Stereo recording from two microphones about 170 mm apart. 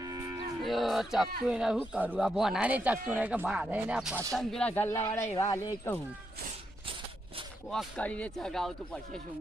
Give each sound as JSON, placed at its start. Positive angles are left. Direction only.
{"t": 0.0, "sound": "livestock", "side_deg": -20}
{"t": 0.6, "sound": "speech", "side_deg": 0}
{"t": 7.7, "sound": "speech", "side_deg": 5}